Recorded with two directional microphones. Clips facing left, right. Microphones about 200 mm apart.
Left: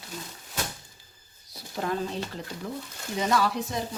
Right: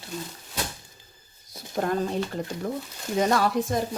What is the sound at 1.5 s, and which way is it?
Speech, 50° right (ahead or behind).